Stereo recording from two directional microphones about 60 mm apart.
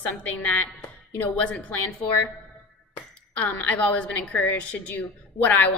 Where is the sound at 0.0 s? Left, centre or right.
Left.